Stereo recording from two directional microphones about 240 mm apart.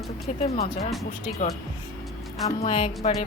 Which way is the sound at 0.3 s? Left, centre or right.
Left.